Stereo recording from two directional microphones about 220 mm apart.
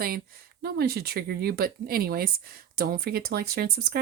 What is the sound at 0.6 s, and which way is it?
Speech, 45° right (ahead or behind).